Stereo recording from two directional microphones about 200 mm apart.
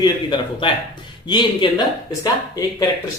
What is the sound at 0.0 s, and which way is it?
Speech, 25° left (ahead or behind).